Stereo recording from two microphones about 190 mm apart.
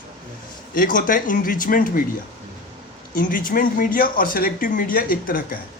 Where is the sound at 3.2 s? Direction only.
50° left (ahead or behind).